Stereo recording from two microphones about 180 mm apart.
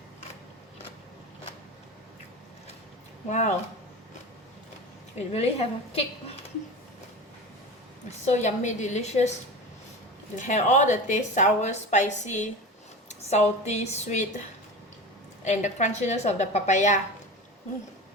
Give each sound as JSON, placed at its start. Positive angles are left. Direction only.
{"t": 3.2, "sound": "a woman's voice", "side_deg": 40}
{"t": 5.1, "sound": "a woman's voice", "side_deg": 35}
{"t": 8.2, "sound": "a woman's voice", "side_deg": 40}
{"t": 10.3, "sound": "a woman's voice", "side_deg": 45}
{"t": 15.4, "sound": "a woman's voice", "side_deg": 40}